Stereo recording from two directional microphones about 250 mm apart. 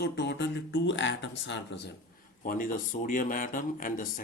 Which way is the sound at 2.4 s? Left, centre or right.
Left.